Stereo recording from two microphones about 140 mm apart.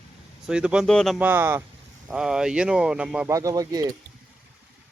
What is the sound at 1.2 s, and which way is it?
Speech, 15° right (ahead or behind).